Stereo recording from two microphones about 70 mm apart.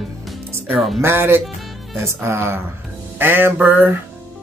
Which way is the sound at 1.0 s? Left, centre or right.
Right.